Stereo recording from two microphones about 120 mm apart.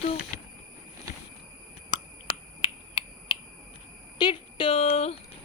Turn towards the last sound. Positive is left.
turn(degrees=60)  # may be behind; listen again after turning